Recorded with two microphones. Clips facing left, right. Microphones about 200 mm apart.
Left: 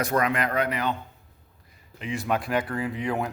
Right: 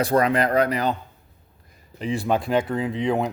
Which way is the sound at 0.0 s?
35° right (ahead or behind).